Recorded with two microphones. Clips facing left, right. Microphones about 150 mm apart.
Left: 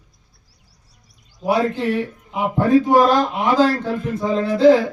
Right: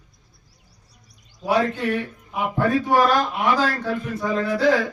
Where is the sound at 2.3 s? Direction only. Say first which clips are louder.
Left 5 dB; 20° left (ahead or behind).